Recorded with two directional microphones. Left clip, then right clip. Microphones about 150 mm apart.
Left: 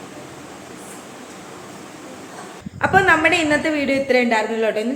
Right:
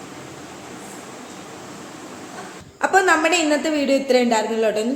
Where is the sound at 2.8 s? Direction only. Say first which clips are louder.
Left 2 dB; 10° right (ahead or behind).